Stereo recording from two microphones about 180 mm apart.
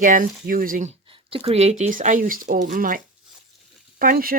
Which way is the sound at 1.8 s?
45° right (ahead or behind).